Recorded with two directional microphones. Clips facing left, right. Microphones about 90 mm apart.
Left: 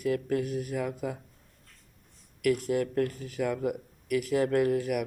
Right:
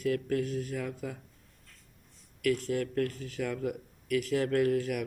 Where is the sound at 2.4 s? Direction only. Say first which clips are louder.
Left 3 dB; 15° left (ahead or behind).